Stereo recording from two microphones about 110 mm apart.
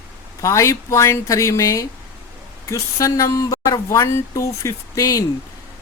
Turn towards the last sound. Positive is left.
turn(degrees=30)  # may be behind; listen again after turning